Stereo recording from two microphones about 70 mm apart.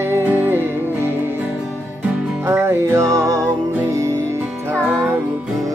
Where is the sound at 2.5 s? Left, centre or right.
Right.